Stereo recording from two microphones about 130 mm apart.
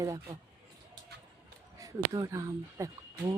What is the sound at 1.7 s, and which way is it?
Speech, 30° right (ahead or behind).